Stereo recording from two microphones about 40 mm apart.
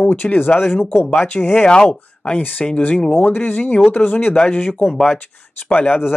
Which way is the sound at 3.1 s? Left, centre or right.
Left.